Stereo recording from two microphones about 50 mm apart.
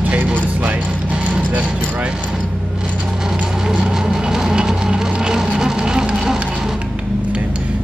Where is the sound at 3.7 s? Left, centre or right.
Centre.